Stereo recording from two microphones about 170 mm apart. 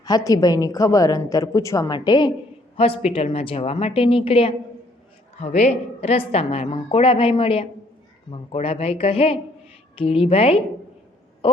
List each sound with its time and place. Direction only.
0.0 s a woman's voice: 20° left (ahead or behind)
11.4 s owl: 30° left (ahead or behind)